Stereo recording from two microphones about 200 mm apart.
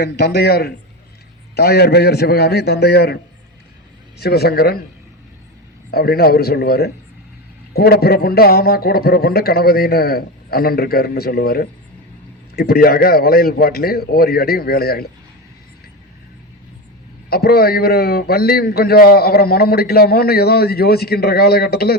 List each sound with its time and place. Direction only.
0.0 s a man's voice: 55° left (ahead or behind)
4.2 s a man's voice: 50° left (ahead or behind)
5.9 s a man's voice: 50° left (ahead or behind)
17.2 s a man's voice: 50° left (ahead or behind)